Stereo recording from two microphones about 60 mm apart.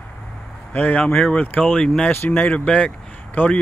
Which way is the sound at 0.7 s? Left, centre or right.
Left.